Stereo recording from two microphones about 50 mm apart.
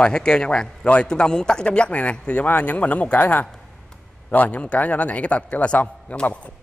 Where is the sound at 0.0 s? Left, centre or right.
Centre.